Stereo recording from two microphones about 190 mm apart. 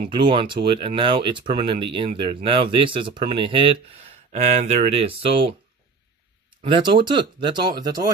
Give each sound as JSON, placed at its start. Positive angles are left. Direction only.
{"t": 0.1, "sound": "speech", "side_deg": -25}
{"t": 6.6, "sound": "speech", "side_deg": -25}